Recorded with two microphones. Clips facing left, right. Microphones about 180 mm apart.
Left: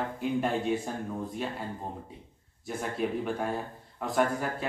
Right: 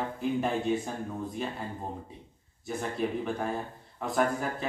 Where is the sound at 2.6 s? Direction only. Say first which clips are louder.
Even; centre (ahead or behind).